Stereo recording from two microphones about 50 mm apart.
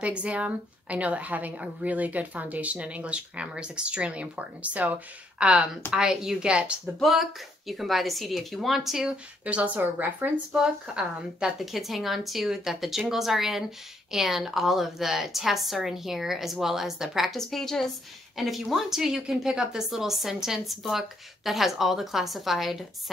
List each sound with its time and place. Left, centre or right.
0.0 s a woman's voice: right
6.5 s a woman's voice: right
7.0 s a woman's voice: centre
9.4 s a woman's voice: right
10.5 s a woman's voice: centre
11.6 s a woman's voice: centre
17.4 s a woman's voice: centre